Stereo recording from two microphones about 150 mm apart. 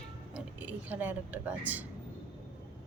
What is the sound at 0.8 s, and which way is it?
Speech, 10° right (ahead or behind).